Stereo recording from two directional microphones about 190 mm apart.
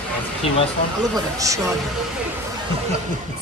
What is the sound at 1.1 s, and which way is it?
Speech, 15° right (ahead or behind).